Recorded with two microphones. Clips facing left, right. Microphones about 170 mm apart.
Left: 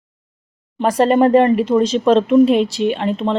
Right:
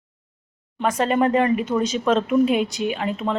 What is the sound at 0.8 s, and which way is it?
Speech, 35° left (ahead or behind).